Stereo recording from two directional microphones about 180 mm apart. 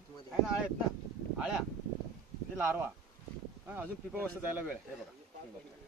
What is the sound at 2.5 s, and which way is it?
Speech, 10° right (ahead or behind).